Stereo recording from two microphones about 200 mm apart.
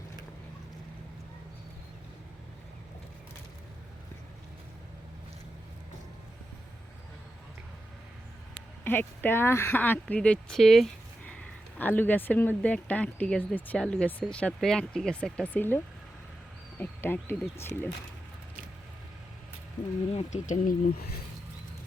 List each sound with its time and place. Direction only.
8.8 s speech: 10° left (ahead or behind)
20.1 s speech: 35° left (ahead or behind)